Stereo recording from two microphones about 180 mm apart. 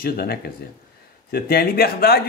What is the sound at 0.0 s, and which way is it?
Speech, 55° left (ahead or behind).